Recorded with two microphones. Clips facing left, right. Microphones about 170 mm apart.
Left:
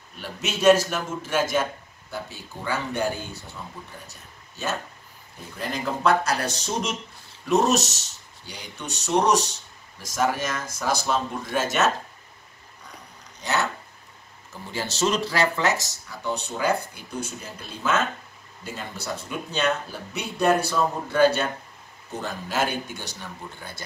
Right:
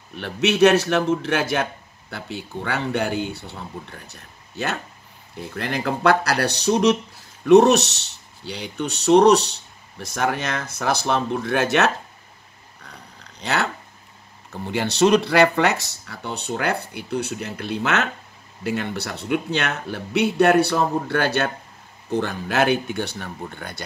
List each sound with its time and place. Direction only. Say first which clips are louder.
0.1 s a man's voice: right 10 dB; 65° right (ahead or behind)
13.4 s a man's voice: right 2 dB; 65° right (ahead or behind)